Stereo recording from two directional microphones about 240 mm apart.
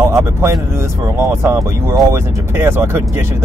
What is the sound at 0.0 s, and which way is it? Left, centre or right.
Speech, centre.